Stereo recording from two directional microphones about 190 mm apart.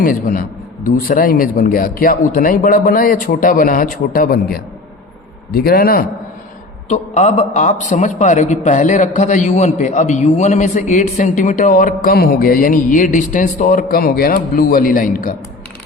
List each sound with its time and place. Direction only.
0.0 s speech: 45° left (ahead or behind)
6.8 s a man's voice: 40° left (ahead or behind)